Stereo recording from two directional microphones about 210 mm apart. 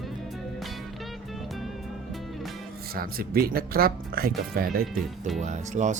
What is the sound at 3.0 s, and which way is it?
Speech, 45° right (ahead or behind).